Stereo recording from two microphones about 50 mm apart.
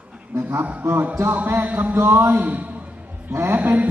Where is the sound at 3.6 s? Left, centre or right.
Right.